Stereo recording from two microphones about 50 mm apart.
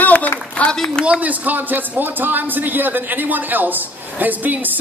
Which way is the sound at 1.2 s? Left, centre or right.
Right.